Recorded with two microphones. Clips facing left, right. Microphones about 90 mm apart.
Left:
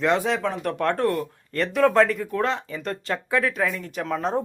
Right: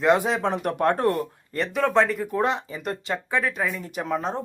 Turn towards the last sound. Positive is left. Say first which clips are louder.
# even
turn(degrees=-15)  # may be behind; listen again after turning